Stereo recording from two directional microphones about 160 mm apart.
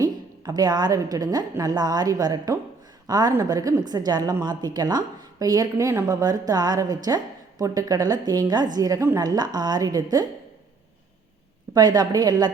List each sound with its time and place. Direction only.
0.0 s a woman's voice: 25° right (ahead or behind)
11.7 s a woman's voice: 25° right (ahead or behind)